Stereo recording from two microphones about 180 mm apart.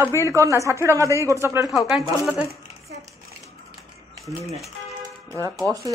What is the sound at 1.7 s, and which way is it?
Speech, centre (ahead or behind).